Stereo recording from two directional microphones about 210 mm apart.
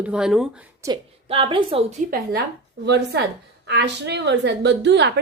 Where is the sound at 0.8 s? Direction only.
25° right (ahead or behind).